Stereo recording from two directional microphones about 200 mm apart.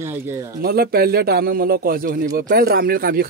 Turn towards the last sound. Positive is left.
turn(degrees=-50)  # may be behind; listen again after turning